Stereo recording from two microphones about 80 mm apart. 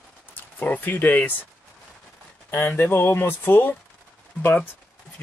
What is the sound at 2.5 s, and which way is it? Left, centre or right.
Speech, left.